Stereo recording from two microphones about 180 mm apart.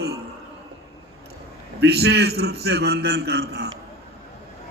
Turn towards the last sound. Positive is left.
turn(degrees=-65)  # may be behind; listen again after turning